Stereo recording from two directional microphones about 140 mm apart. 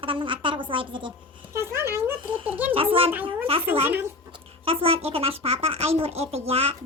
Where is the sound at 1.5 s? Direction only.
20° right (ahead or behind).